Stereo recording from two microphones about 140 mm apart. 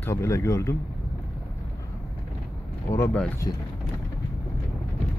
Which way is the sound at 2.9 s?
20° left (ahead or behind).